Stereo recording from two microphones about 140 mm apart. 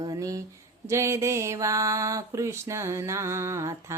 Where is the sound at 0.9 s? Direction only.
20° right (ahead or behind).